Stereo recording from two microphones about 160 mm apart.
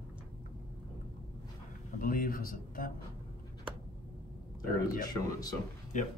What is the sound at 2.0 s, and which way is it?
Speech, 60° left (ahead or behind).